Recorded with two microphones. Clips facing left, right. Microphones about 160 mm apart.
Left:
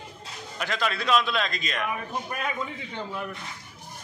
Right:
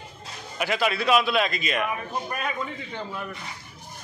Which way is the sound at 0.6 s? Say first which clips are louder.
Right 4 dB; 10° right (ahead or behind).